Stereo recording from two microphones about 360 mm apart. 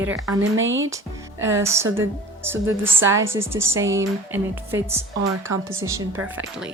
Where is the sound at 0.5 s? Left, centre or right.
Right.